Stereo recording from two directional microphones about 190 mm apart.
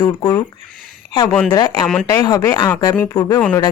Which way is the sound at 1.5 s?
20° left (ahead or behind).